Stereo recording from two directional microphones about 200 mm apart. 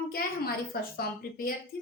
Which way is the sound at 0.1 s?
50° left (ahead or behind).